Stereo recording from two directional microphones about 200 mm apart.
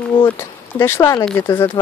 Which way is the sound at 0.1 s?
25° left (ahead or behind).